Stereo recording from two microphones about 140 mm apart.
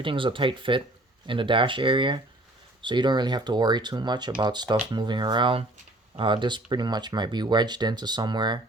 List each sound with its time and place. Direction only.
0.0 s speech: 35° right (ahead or behind)